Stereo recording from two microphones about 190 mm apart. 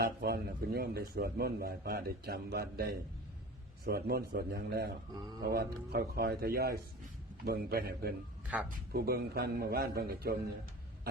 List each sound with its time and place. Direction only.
0.0 s a man's voice: 55° right (ahead or behind)